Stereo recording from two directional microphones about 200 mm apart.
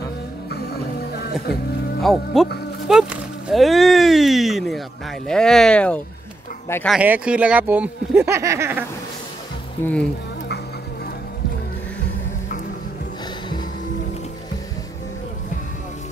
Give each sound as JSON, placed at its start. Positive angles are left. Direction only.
{"t": 2.0, "sound": "speech", "side_deg": 0}
{"t": 7.0, "sound": "speech", "side_deg": -5}
{"t": 9.8, "sound": "speech", "side_deg": 10}